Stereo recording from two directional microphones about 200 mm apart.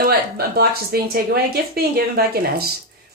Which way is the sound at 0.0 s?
50° right (ahead or behind).